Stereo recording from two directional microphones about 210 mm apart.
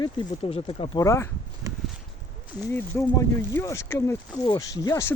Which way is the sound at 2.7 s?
10° left (ahead or behind).